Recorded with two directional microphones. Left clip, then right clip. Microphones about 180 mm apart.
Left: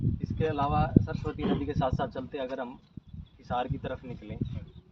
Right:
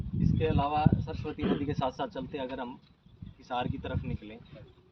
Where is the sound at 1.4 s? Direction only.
60° left (ahead or behind).